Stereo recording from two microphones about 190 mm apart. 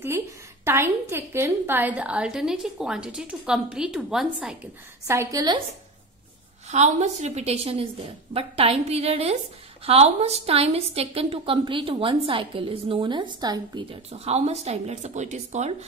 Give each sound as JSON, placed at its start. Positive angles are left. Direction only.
{"t": 0.7, "sound": "a woman's voice", "side_deg": -10}
{"t": 5.0, "sound": "a woman's voice", "side_deg": -15}
{"t": 6.7, "sound": "a woman's voice", "side_deg": -35}